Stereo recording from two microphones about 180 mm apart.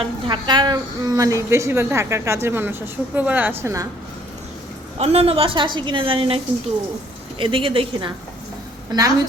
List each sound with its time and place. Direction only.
0.0 s a woman's voice: 25° right (ahead or behind)
4.9 s a woman's voice: 35° right (ahead or behind)